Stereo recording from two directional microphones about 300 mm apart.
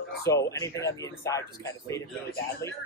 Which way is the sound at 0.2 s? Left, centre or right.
Centre.